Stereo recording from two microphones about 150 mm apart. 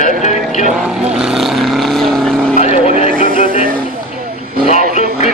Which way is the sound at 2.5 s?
50° left (ahead or behind).